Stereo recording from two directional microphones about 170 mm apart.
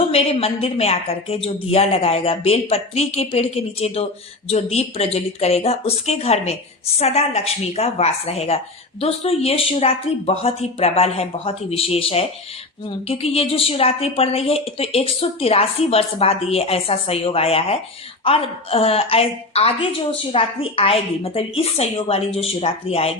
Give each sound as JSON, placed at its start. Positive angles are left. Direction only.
{"t": 0.1, "sound": "speech", "side_deg": 35}